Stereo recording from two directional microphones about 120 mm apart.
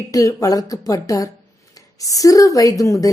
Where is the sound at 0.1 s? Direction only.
30° left (ahead or behind).